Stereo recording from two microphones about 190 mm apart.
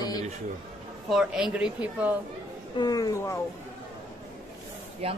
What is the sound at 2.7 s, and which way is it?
Speech, 20° left (ahead or behind).